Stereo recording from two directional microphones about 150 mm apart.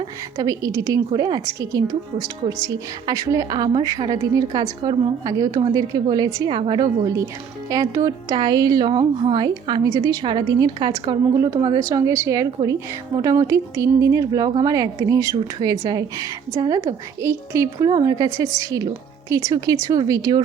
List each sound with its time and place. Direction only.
0.3 s a woman's voice: 25° right (ahead or behind)
15.4 s a woman's voice: 35° right (ahead or behind)